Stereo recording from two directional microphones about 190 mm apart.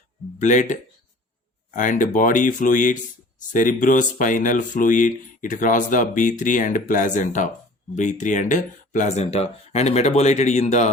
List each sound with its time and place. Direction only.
0.3 s speech: 40° left (ahead or behind)